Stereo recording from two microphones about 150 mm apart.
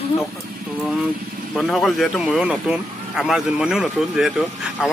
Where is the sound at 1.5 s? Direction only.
Centre (ahead or behind).